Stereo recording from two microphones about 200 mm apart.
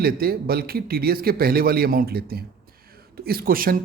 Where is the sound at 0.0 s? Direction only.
50° right (ahead or behind).